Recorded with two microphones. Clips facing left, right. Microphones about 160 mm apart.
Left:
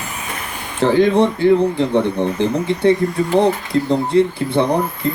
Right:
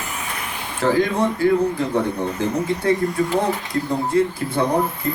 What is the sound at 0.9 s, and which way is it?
Speech, 30° left (ahead or behind).